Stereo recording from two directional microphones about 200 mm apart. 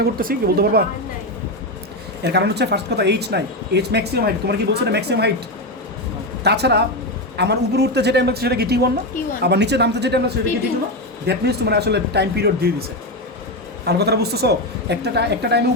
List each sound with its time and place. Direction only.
0.0 s speech: 50° right (ahead or behind)
2.2 s speech: 55° right (ahead or behind)
6.4 s speech: 55° right (ahead or behind)
13.8 s speech: 55° right (ahead or behind)